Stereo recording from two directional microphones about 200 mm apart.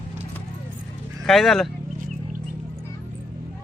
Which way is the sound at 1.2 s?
Centre (ahead or behind).